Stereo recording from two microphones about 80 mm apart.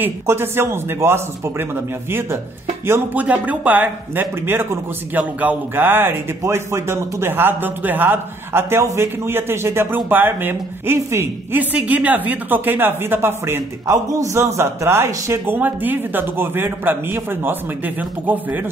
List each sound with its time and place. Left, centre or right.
0.0 s speech: right
2.9 s speech: centre
11.7 s speech: centre; by 15.4 s right
15.4 s speech: right